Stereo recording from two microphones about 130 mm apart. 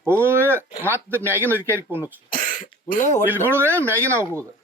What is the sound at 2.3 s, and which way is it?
Throat clearing, 90° left.